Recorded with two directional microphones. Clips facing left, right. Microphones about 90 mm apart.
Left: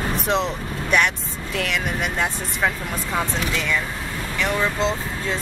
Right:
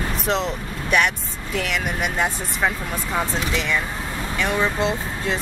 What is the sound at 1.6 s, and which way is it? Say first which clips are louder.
Speech: even; 5° right (ahead or behind).